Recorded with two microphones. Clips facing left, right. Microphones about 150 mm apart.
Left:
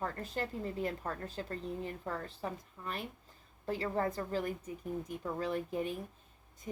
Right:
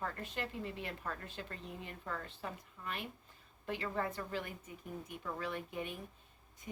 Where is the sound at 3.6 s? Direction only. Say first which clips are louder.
Left 4 dB; 35° left (ahead or behind).